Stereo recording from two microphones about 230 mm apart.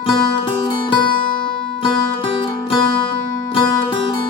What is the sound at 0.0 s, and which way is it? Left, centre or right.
Music, centre.